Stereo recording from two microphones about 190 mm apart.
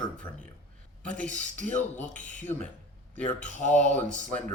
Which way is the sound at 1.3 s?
40° right (ahead or behind).